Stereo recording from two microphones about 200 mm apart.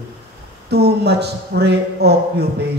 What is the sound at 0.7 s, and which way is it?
Speech, 55° right (ahead or behind).